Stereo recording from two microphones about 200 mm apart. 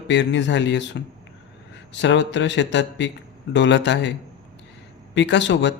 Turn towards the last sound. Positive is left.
turn(degrees=65)  # may be behind; listen again after turning